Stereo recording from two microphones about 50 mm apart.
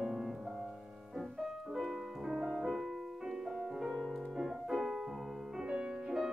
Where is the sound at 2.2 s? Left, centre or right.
Centre.